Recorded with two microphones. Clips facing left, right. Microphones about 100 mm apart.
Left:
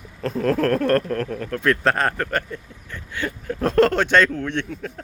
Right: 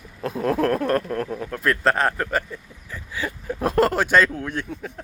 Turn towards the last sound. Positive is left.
turn(degrees=-5)  # may be behind; listen again after turning